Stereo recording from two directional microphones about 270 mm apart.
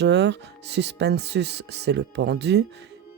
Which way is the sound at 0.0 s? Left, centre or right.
Right.